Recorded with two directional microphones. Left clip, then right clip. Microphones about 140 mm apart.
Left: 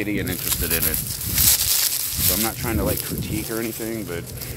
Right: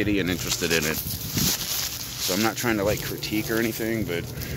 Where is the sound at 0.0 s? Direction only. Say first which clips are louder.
Right 1 dB; 25° right (ahead or behind).